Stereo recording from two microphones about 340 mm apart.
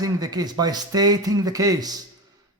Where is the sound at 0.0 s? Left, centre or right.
Centre.